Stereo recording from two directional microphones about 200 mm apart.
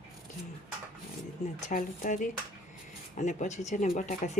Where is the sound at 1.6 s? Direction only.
40° left (ahead or behind).